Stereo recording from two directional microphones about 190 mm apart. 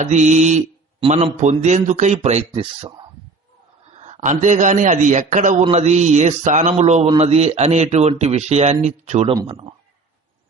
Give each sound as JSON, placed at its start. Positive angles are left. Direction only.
{"t": 0.0, "sound": "a man's voice", "side_deg": -40}
{"t": 2.5, "sound": "speech", "side_deg": -25}
{"t": 3.9, "sound": "a man's voice", "side_deg": -40}
{"t": 9.3, "sound": "speech", "side_deg": -20}